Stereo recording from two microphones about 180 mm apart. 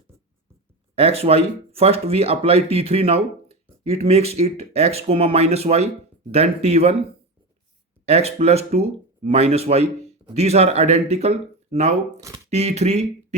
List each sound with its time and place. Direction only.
0.9 s speech: 35° right (ahead or behind)
8.0 s speech: 35° right (ahead or behind)